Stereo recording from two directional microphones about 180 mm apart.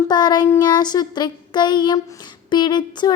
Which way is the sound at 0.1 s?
25° left (ahead or behind).